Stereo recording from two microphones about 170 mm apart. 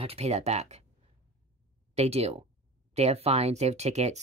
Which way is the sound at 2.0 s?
40° right (ahead or behind).